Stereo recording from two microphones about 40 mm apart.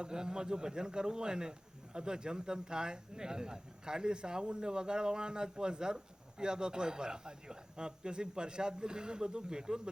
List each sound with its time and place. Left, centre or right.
0.0 s a man's voice: centre